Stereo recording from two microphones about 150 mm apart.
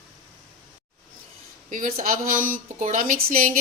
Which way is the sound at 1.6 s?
65° right (ahead or behind).